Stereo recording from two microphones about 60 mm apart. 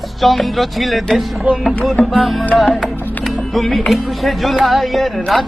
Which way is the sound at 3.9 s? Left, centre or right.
Centre.